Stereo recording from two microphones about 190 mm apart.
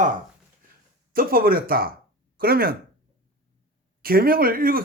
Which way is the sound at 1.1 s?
50° right (ahead or behind).